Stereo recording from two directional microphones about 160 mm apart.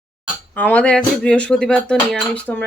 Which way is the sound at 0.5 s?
10° left (ahead or behind).